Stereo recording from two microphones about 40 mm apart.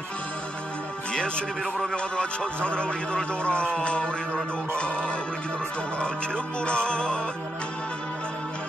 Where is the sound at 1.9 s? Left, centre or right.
Left.